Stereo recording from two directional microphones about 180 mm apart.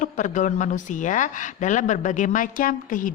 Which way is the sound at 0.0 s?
45° left (ahead or behind).